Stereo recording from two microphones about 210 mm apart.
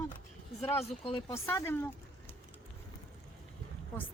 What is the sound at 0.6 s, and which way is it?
Speech, 25° left (ahead or behind).